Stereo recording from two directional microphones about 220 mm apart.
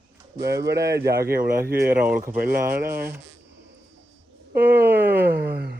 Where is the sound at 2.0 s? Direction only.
5° right (ahead or behind).